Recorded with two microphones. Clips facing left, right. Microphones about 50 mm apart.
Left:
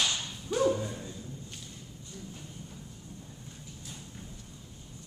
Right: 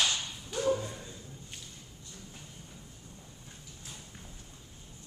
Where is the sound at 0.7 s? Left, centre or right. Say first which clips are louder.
Right 1 dB; centre.